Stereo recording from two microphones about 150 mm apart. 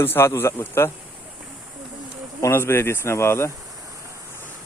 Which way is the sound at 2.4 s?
15° left (ahead or behind).